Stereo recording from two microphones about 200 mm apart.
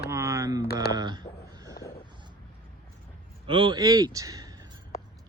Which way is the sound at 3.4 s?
25° right (ahead or behind).